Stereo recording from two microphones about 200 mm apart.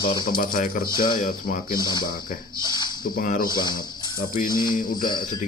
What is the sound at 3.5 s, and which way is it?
Speech, 20° left (ahead or behind).